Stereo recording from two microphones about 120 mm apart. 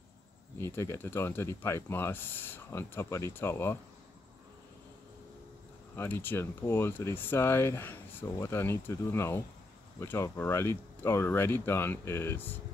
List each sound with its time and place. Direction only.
0.6 s speech: 20° left (ahead or behind)
5.9 s speech: 20° left (ahead or behind)